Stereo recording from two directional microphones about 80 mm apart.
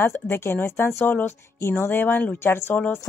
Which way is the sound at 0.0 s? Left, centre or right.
Left.